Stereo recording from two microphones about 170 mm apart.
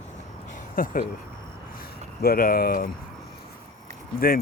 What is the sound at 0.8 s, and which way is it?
Speech, 55° left (ahead or behind).